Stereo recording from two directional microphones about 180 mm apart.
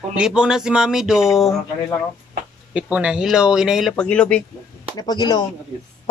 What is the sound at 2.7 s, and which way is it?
Speech, 5° right (ahead or behind).